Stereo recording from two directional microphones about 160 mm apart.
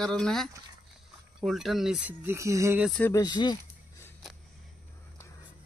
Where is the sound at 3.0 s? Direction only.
15° left (ahead or behind).